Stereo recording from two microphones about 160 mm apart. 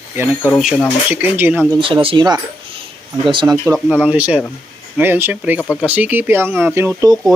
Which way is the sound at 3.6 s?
10° right (ahead or behind).